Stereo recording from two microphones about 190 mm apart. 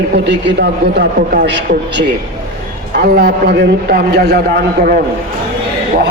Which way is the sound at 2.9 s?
50° right (ahead or behind).